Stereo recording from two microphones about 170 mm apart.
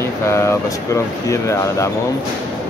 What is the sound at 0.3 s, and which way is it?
Speech, 15° left (ahead or behind).